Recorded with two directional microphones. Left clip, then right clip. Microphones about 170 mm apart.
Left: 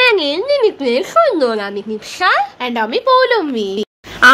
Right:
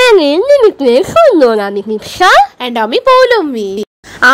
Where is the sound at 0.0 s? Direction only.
50° right (ahead or behind).